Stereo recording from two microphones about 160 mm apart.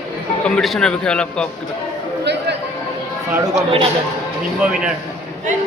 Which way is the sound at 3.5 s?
35° right (ahead or behind).